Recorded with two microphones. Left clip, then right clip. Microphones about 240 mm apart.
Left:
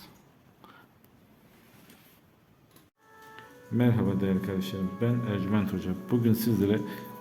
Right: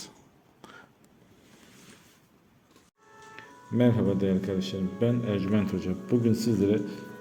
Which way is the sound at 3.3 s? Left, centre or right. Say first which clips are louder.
Right 3 dB; centre.